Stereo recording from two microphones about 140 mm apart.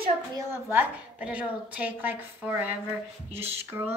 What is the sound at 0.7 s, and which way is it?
A woman's voice, 10° right (ahead or behind).